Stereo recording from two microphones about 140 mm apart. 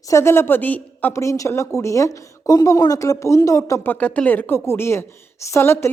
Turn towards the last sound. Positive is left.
turn(degrees=20)  # may be behind; listen again after turning